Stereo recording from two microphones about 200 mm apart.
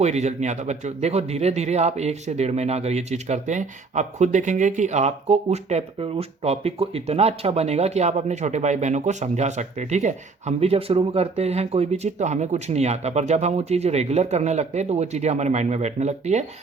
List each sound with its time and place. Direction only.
0.0 s speech: 35° right (ahead or behind)